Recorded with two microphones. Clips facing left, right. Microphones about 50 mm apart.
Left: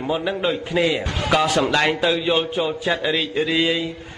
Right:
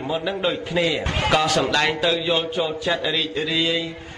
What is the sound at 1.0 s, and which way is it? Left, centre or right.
Speech, right.